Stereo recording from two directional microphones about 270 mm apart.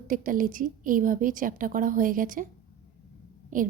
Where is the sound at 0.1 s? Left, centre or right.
Right.